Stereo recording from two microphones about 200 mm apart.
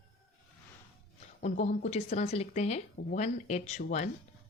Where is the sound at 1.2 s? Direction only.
35° left (ahead or behind).